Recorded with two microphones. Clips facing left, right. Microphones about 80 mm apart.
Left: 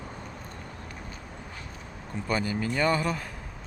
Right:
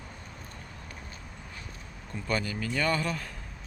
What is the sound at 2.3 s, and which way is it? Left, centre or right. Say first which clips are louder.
Speech: left 3 dB; centre.